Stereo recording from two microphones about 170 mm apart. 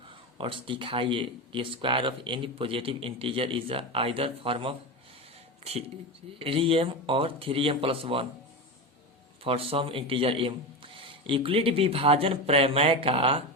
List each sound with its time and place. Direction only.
0.3 s speech: 30° right (ahead or behind)
6.4 s speech: 35° right (ahead or behind)
9.4 s speech: 35° right (ahead or behind)